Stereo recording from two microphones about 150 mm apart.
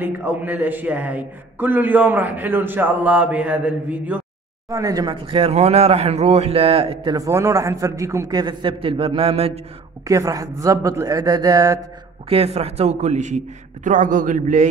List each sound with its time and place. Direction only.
0.0 s a man's voice: 10° right (ahead or behind)
4.6 s speech: 20° right (ahead or behind); by 7.2 s 40° right (ahead or behind)
7.2 s a man's voice: 20° right (ahead or behind); by 9.5 s 40° right (ahead or behind)
10.0 s a man's voice: 25° right (ahead or behind)
12.3 s a woman's voice: 40° right (ahead or behind); by 14.7 s 55° right (ahead or behind)